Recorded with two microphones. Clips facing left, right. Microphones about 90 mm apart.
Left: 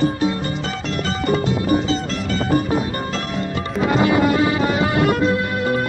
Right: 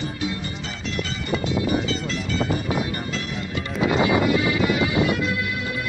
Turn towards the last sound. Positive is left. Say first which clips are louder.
# left 8 dB
turn(degrees=45)  # may be behind; listen again after turning